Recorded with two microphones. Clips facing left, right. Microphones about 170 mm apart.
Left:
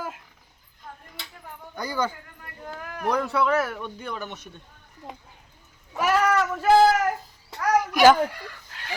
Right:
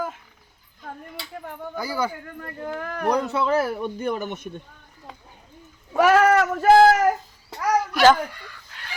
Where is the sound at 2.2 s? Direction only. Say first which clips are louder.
Right 8 dB; 65° right (ahead or behind).